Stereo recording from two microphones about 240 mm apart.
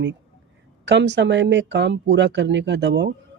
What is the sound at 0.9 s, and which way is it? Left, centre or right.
Speech, right.